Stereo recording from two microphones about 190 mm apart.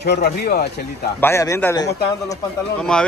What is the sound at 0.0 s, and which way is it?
Speech, 55° left (ahead or behind).